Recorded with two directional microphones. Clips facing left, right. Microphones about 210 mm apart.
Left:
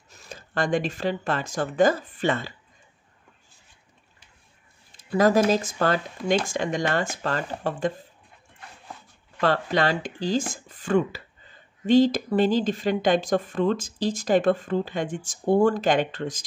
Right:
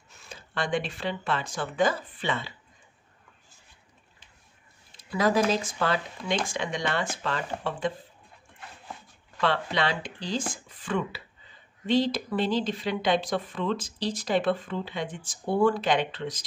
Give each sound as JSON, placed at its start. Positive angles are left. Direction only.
{"t": 0.1, "sound": "speech", "side_deg": 40}
{"t": 4.9, "sound": "a sound", "side_deg": 45}
{"t": 5.5, "sound": "speech", "side_deg": 45}
{"t": 9.4, "sound": "speech", "side_deg": 45}